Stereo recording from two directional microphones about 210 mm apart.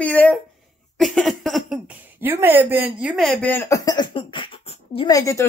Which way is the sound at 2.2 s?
10° right (ahead or behind).